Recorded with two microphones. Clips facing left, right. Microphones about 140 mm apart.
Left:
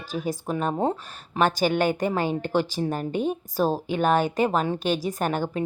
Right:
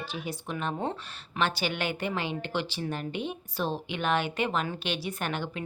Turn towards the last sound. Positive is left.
turn(degrees=40)  # may be behind; listen again after turning